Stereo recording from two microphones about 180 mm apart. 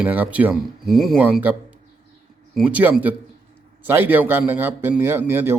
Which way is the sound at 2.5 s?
10° right (ahead or behind).